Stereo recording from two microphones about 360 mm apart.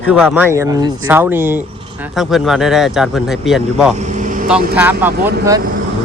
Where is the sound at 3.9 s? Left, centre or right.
Centre.